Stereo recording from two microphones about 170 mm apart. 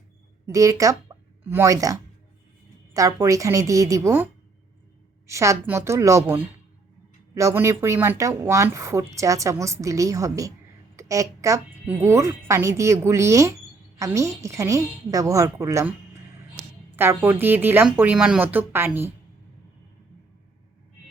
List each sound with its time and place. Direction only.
0.4 s a woman's voice: 20° right (ahead or behind)
5.3 s speech: 15° right (ahead or behind)
16.9 s a woman's voice: 10° right (ahead or behind)